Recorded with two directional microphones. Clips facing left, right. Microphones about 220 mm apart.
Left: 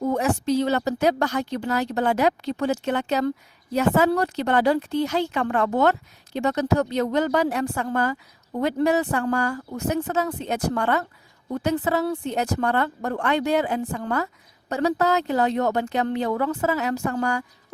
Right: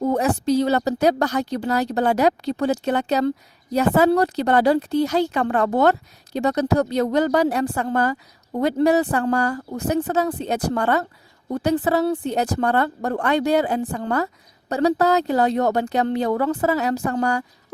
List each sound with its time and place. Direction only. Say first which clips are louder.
0.0 s speech: right 2 dB; 35° right (ahead or behind)